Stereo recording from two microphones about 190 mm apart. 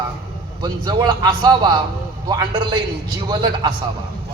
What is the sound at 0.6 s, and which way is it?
A man's voice, 20° right (ahead or behind).